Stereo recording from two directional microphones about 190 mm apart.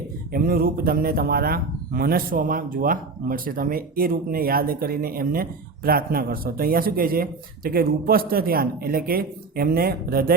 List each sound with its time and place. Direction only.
0.3 s speech: 50° right (ahead or behind)